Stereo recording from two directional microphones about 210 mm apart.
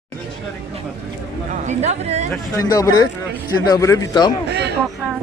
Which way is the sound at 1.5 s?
35° right (ahead or behind).